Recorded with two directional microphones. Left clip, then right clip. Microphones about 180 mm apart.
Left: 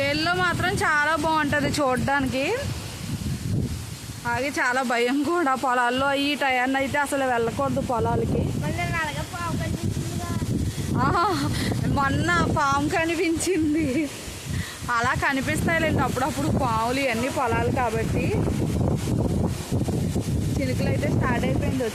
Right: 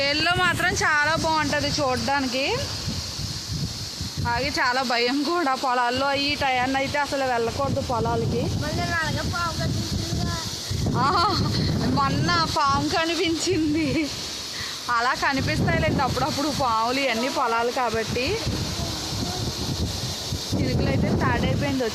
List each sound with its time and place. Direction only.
0.0 s a sound: 5° left (ahead or behind); by 2.6 s 30° left (ahead or behind)
4.3 s speech: 15° left (ahead or behind); by 8.1 s 40° left (ahead or behind)
11.0 s speech: 15° left (ahead or behind)
12.2 s speech: 30° left (ahead or behind); by 18.0 s 15° left (ahead or behind)